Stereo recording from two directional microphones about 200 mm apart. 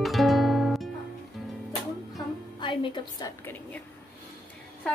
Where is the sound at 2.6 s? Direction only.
25° left (ahead or behind).